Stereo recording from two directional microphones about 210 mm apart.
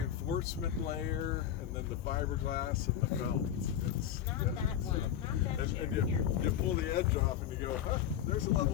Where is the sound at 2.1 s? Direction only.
45° left (ahead or behind).